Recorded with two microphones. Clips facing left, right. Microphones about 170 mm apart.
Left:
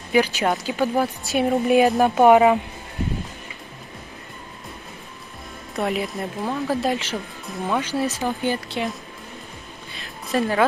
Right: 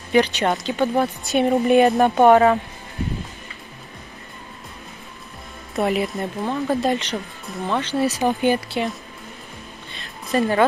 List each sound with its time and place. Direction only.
0.1 s a woman's voice: 5° left (ahead or behind)
5.8 s a woman's voice: centre (ahead or behind)
8.2 s speech: 15° right (ahead or behind)
8.6 s a woman's voice: centre (ahead or behind)
9.9 s a sound: centre (ahead or behind)